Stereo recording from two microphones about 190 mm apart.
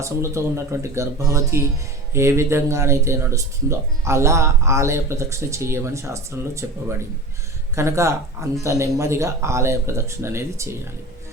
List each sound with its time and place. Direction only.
0.0 s speech: 15° right (ahead or behind)